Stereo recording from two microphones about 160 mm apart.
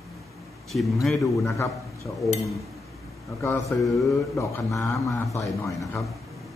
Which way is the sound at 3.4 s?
20° left (ahead or behind).